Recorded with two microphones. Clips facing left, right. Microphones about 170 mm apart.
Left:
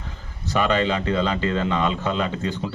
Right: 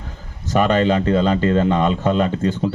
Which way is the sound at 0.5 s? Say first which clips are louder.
Right 5 dB; 45° right (ahead or behind).